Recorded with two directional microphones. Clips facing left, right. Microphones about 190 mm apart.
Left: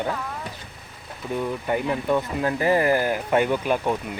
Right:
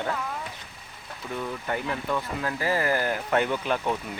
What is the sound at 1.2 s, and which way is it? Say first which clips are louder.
Speech: left 6 dB; 15° left (ahead or behind).